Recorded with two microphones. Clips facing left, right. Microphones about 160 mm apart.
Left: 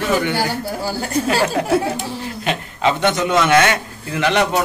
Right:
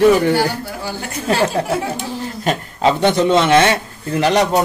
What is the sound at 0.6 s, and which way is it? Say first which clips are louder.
Speech: left 3 dB; 35° left (ahead or behind).